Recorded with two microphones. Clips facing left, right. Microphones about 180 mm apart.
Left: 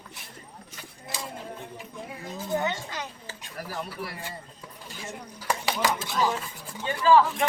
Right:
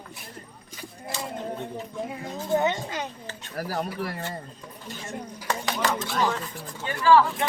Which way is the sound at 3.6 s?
35° right (ahead or behind).